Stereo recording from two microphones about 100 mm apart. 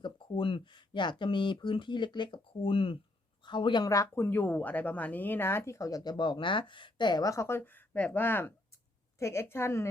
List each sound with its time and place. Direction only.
0.0 s a woman's voice: 50° left (ahead or behind)
3.8 s a woman's voice: 35° left (ahead or behind)